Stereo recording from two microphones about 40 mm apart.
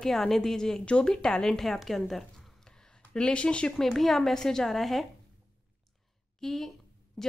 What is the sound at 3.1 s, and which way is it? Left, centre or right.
Speech, left.